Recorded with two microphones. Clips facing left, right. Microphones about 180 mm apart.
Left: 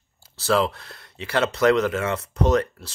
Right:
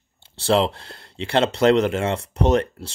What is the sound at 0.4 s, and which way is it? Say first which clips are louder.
Speech: right 2 dB; 30° right (ahead or behind).